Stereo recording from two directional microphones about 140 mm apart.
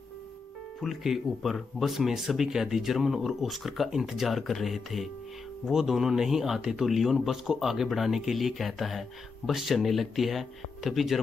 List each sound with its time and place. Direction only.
0.7 s speech: centre (ahead or behind)